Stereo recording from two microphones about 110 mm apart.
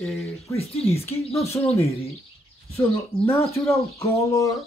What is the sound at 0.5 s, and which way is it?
Speech, 65° left (ahead or behind).